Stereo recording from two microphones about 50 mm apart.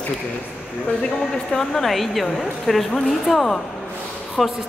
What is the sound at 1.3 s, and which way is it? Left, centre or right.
A man's voice, centre.